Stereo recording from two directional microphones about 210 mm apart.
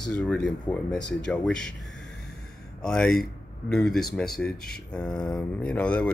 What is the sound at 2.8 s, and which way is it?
Speech, 5° left (ahead or behind).